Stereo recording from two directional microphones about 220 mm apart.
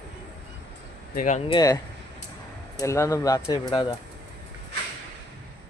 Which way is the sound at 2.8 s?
15° left (ahead or behind).